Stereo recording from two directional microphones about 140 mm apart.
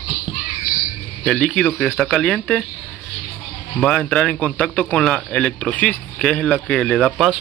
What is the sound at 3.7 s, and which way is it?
Speech, 5° left (ahead or behind).